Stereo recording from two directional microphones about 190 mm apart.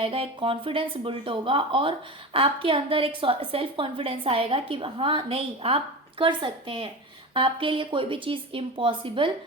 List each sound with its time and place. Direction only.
0.0 s a woman's voice: 30° right (ahead or behind)